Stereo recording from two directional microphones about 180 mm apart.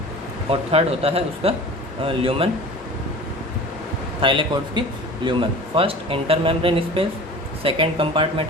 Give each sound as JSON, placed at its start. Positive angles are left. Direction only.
{"t": 0.5, "sound": "speech", "side_deg": -35}
{"t": 4.2, "sound": "speech", "side_deg": -25}